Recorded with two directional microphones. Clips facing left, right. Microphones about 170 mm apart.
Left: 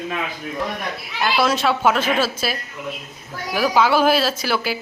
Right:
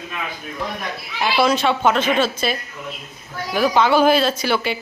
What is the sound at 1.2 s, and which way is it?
A woman's voice, centre (ahead or behind).